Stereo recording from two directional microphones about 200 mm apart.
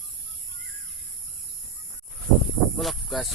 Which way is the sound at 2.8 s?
Centre (ahead or behind).